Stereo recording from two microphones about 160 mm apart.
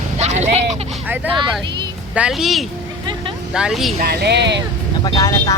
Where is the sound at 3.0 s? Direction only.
30° right (ahead or behind).